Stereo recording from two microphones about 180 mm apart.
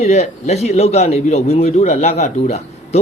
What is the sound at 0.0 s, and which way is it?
A man's voice, 35° left (ahead or behind).